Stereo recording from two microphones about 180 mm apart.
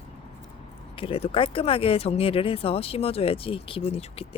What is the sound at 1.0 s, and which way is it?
Speech, 30° left (ahead or behind).